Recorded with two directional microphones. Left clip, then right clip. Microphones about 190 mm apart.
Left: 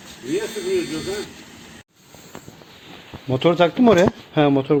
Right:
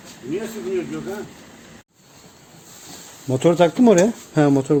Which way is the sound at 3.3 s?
30° right (ahead or behind).